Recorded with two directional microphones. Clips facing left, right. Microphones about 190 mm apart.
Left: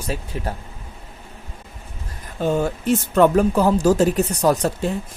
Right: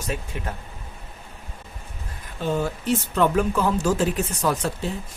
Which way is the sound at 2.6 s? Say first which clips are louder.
Left 4 dB; 50° left (ahead or behind).